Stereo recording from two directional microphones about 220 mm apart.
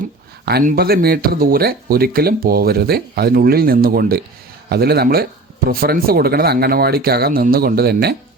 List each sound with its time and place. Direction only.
0.4 s speech: 45° right (ahead or behind)